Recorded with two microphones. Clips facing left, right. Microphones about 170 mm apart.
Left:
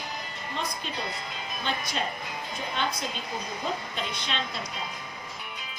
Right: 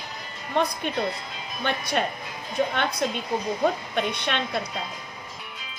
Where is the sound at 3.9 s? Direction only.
60° right (ahead or behind).